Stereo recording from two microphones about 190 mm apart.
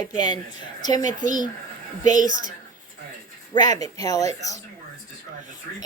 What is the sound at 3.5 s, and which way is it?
A woman's voice, 20° left (ahead or behind).